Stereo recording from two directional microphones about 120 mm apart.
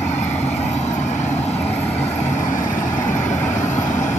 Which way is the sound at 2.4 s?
90° left.